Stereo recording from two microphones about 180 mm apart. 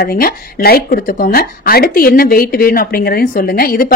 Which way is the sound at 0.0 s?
55° left (ahead or behind).